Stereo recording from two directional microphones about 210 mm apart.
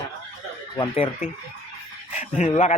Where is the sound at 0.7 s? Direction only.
25° left (ahead or behind).